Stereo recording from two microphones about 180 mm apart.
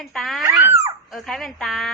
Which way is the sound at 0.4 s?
15° right (ahead or behind).